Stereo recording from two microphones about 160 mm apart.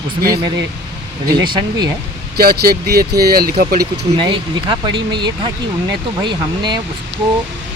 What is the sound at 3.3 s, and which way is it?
Speech, 70° right (ahead or behind).